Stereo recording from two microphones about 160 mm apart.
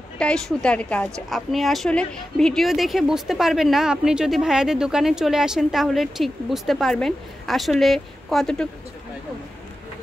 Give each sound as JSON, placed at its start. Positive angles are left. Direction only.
{"t": 0.2, "sound": "a woman's voice", "side_deg": 5}